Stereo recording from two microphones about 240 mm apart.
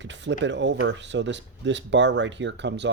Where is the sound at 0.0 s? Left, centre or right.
Right.